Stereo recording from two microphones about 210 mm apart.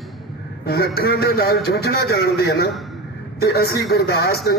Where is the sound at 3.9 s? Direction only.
50° left (ahead or behind).